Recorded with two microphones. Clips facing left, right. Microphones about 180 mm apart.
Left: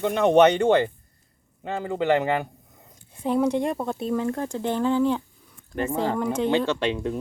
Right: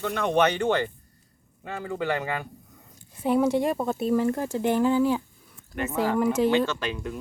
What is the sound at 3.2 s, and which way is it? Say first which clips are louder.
Speech: even; 5° right (ahead or behind).